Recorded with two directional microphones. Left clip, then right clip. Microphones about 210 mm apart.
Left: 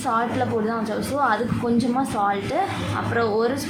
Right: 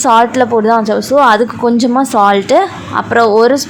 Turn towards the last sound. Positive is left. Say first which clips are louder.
# right 14 dB
turn(degrees=-40)  # may be behind; listen again after turning